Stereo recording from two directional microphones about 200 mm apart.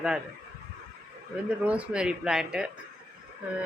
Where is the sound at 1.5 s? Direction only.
5° right (ahead or behind).